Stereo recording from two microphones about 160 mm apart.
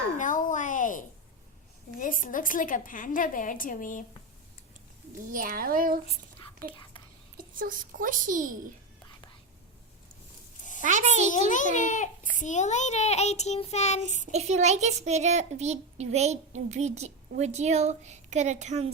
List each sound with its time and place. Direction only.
0.2 s a sound: 55° left (ahead or behind)
2.0 s a woman's voice: 55° left (ahead or behind)
5.3 s a child's voice: 60° right (ahead or behind)
6.7 s speech: 30° left (ahead or behind)
7.3 s a child's voice: 60° right (ahead or behind)
10.8 s a child's voice: 50° right (ahead or behind)
11.3 s a child's voice: 50° left (ahead or behind)
14.3 s a child's voice: 45° right (ahead or behind)